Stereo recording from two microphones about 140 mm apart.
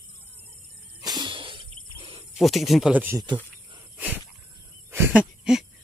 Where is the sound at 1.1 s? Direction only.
35° right (ahead or behind).